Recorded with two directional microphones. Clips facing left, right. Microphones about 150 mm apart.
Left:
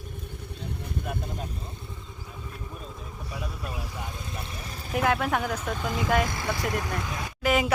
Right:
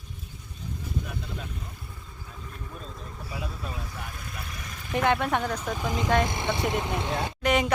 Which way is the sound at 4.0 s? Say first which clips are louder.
Left 3 dB; 20° left (ahead or behind).